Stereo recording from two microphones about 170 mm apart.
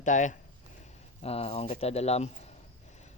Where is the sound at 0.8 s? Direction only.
35° left (ahead or behind).